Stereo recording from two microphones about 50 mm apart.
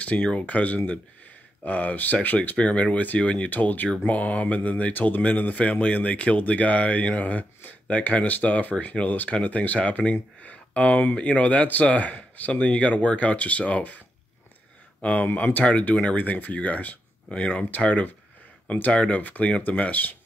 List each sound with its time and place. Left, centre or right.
0.0 s speech: left